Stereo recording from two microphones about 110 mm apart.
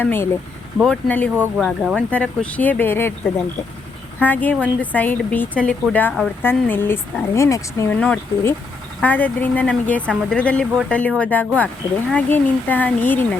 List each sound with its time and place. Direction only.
0.0 s a woman's voice: 20° left (ahead or behind)
1.5 s a woman's voice: centre (ahead or behind); by 3.1 s 20° left (ahead or behind)
4.2 s a woman's voice: 15° left (ahead or behind)
7.9 s a woman's voice: 15° left (ahead or behind)